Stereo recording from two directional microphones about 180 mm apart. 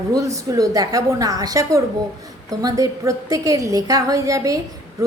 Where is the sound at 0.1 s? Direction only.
20° right (ahead or behind).